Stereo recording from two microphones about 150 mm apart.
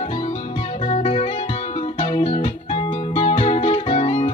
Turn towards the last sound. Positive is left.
turn(degrees=40)  # may be behind; listen again after turning